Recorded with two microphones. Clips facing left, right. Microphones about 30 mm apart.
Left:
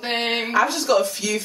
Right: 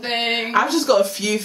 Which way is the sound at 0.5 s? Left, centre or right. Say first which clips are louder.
Right 2 dB; centre.